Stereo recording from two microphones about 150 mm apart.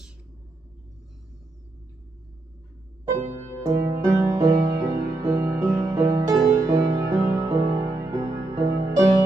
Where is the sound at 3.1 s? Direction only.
50° right (ahead or behind).